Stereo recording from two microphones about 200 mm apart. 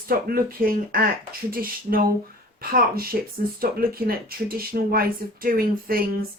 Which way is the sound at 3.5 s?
50° right (ahead or behind).